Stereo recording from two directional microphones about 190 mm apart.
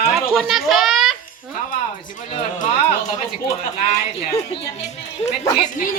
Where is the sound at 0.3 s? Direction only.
Centre (ahead or behind).